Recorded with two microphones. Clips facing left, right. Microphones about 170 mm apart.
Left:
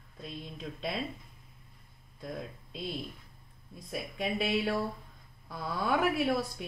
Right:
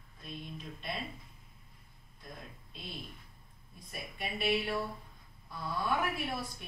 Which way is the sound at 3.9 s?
90° left.